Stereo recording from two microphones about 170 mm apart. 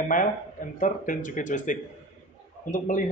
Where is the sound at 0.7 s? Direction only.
50° left (ahead or behind).